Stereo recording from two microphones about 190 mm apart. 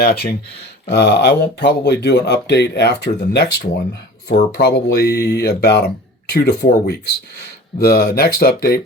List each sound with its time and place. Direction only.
0.0 s speech: 55° left (ahead or behind)